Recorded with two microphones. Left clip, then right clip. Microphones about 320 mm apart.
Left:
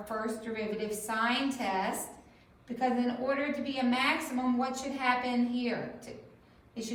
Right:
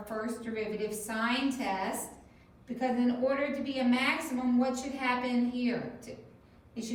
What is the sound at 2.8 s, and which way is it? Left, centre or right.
A woman's voice, centre.